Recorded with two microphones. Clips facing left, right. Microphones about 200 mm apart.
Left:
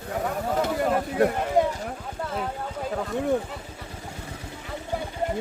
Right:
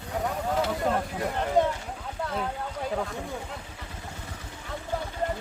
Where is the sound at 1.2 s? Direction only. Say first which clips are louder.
Left 9 dB; 65° left (ahead or behind).